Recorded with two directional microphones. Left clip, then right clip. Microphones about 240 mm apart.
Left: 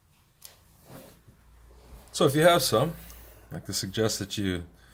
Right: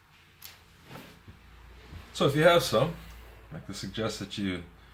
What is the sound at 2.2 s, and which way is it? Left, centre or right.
Speech, left.